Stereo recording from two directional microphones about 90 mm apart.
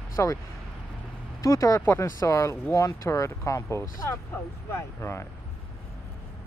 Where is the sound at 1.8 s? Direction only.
25° left (ahead or behind).